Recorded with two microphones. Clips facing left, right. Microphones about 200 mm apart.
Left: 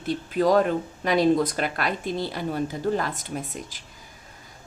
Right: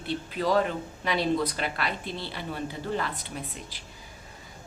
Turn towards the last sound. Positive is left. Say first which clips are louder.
# left 5 dB
turn(degrees=45)  # may be behind; listen again after turning